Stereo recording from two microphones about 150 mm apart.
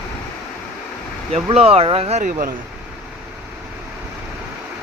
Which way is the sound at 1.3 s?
40° right (ahead or behind).